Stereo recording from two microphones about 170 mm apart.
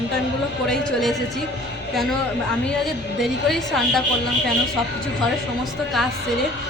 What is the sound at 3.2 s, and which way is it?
Speech, centre (ahead or behind).